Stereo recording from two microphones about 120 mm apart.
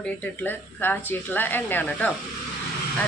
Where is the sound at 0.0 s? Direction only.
15° left (ahead or behind).